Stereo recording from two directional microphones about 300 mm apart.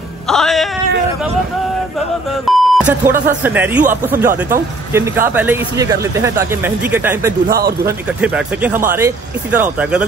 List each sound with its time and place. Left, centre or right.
0.3 s music: centre
2.4 s beep: centre
3.4 s speech: centre
7.4 s speech: right
7.8 s speech: centre